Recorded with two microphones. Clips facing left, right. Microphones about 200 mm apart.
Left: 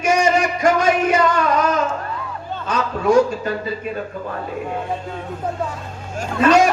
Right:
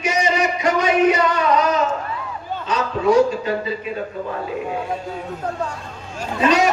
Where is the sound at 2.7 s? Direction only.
45° left (ahead or behind).